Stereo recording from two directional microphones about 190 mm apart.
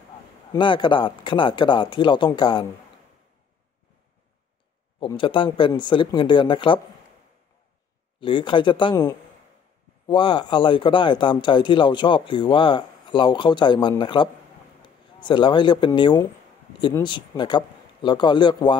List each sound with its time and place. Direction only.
0.5 s speech: 25° left (ahead or behind)
5.0 s speech: 25° left (ahead or behind)
8.2 s speech: 25° left (ahead or behind)